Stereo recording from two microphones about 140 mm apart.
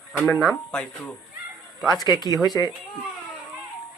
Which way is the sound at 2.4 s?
30° left (ahead or behind).